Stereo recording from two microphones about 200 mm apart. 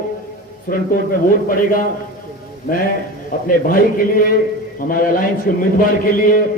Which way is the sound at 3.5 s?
45° left (ahead or behind).